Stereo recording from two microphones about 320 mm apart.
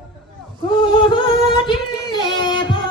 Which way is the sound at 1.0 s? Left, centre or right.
Centre.